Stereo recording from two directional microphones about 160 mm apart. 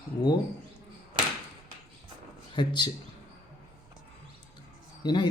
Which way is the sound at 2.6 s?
30° left (ahead or behind).